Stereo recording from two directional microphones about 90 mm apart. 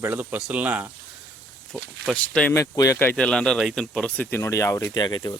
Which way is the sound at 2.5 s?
35° left (ahead or behind).